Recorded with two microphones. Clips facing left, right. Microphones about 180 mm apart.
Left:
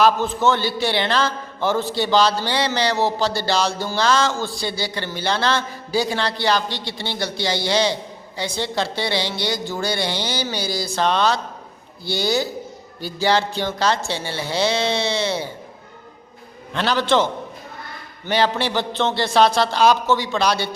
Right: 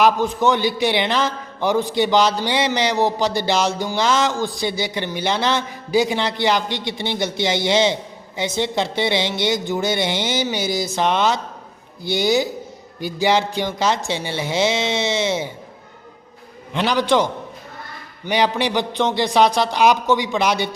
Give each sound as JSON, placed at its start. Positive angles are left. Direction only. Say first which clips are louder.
{"t": 0.0, "sound": "a man's voice", "louder": "right 1 dB", "side_deg": -15}
{"t": 16.7, "sound": "a man's voice", "louder": "right 1 dB", "side_deg": -15}
{"t": 18.3, "sound": "a man's voice", "louder": "right 1 dB", "side_deg": -15}